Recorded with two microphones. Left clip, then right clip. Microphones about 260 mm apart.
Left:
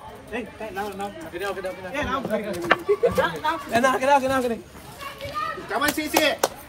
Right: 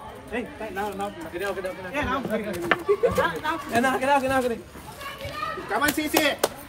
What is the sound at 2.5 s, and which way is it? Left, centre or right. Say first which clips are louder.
A man's voice: left 2 dB; centre.